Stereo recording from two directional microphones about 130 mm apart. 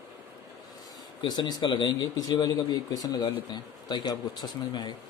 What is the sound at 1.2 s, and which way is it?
Speech, 35° left (ahead or behind).